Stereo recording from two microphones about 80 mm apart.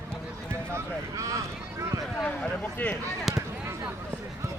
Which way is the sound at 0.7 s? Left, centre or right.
Right.